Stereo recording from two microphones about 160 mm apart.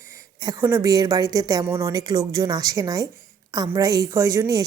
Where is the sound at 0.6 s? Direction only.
15° right (ahead or behind).